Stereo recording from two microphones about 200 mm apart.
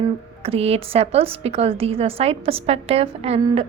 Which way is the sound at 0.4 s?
30° right (ahead or behind).